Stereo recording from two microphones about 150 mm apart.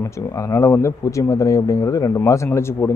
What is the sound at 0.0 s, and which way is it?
Speech, 20° left (ahead or behind).